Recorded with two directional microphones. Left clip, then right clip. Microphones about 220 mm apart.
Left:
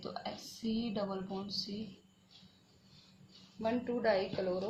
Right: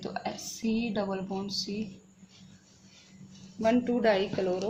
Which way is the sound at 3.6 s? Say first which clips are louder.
Right 8 dB; 45° right (ahead or behind).